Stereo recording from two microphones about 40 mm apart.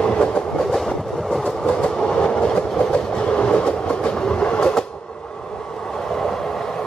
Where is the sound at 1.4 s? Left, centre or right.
Left.